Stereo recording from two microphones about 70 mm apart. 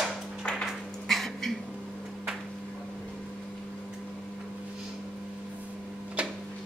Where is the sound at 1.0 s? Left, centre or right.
Centre.